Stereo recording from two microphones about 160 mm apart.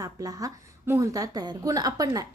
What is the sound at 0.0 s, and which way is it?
A woman's voice, 20° right (ahead or behind).